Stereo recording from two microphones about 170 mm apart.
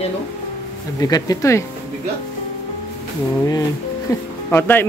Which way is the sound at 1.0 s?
20° left (ahead or behind).